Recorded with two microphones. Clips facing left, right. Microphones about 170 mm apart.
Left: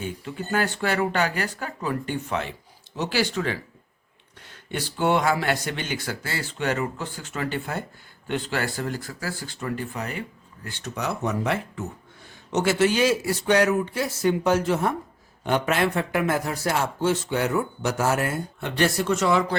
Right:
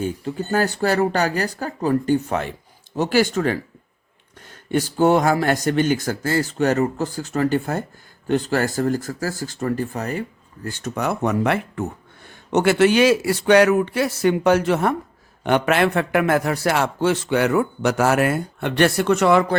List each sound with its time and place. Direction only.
0.0 s a man's voice: 40° right (ahead or behind); by 19.5 s 60° right (ahead or behind)